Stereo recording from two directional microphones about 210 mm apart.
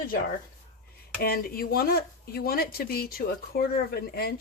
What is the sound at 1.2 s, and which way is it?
Speech, 45° left (ahead or behind).